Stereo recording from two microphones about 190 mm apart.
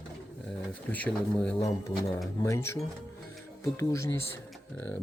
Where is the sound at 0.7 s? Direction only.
10° left (ahead or behind).